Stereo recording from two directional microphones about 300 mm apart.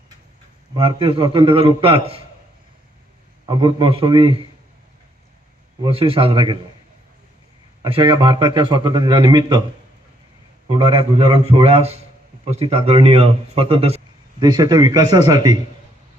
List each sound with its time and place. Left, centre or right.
0.7 s a man's voice: centre
3.4 s a man's voice: centre
5.8 s a man's voice: centre
7.8 s a man's voice: centre
10.7 s a man's voice: centre